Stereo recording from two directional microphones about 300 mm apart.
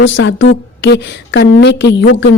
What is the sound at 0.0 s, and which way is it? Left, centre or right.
A woman's voice, left.